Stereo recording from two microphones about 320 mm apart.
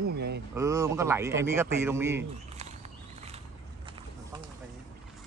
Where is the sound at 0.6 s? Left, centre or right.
Centre.